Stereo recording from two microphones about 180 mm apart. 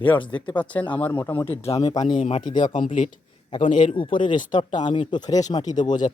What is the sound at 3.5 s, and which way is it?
Speech, 30° left (ahead or behind).